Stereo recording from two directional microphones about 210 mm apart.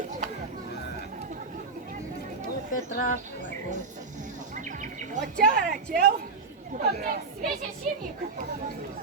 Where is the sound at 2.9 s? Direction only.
40° left (ahead or behind).